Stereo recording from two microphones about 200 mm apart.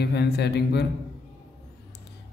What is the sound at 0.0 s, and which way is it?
Mantra, 55° left (ahead or behind).